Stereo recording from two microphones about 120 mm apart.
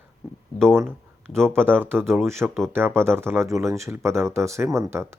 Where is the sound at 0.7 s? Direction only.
20° right (ahead or behind).